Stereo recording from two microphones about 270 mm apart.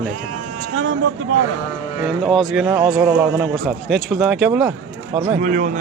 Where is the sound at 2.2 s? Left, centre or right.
Centre.